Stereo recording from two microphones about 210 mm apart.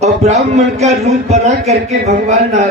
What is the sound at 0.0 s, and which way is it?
A man's voice, 30° right (ahead or behind).